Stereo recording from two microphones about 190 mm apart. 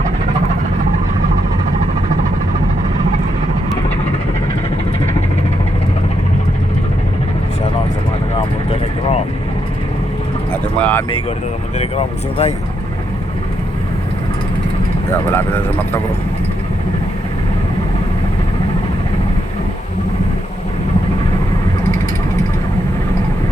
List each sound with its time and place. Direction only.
8.4 s vehicle: 35° left (ahead or behind)
10.5 s vehicle: 10° left (ahead or behind)
11.8 s speech: 30° left (ahead or behind)
15.1 s speech: 10° left (ahead or behind)